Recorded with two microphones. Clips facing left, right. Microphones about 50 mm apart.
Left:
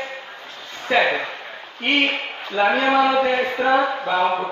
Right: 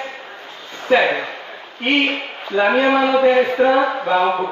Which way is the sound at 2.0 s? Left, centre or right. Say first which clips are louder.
Right 1 dB; centre.